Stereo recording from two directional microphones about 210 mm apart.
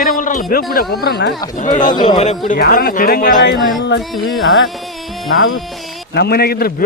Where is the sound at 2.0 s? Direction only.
25° left (ahead or behind).